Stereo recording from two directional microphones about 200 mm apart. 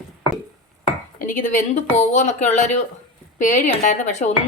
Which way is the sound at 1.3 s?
40° left (ahead or behind).